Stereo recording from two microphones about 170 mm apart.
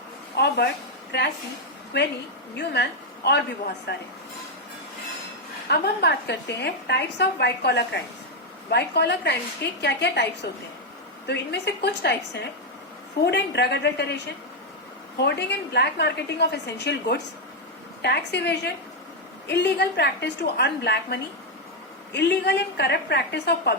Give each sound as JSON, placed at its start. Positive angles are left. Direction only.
{"t": 0.3, "sound": "a woman's voice", "side_deg": 70}
{"t": 2.6, "sound": "a woman's voice", "side_deg": 80}
{"t": 5.6, "sound": "a woman's voice", "side_deg": 70}
{"t": 11.3, "sound": "a woman's voice", "side_deg": 85}
{"t": 13.2, "sound": "a woman's voice", "side_deg": 80}
{"t": 15.2, "sound": "a woman's voice", "side_deg": 80}